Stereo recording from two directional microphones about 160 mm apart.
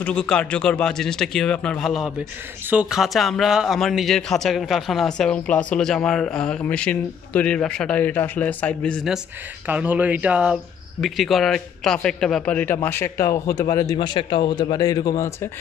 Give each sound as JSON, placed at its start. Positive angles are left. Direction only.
{"t": 0.0, "sound": "speech", "side_deg": 5}
{"t": 9.7, "sound": "speech", "side_deg": -10}